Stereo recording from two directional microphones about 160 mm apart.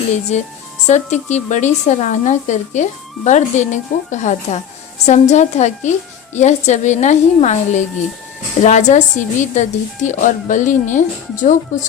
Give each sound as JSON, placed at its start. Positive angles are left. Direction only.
{"t": 0.9, "sound": "speech", "side_deg": 45}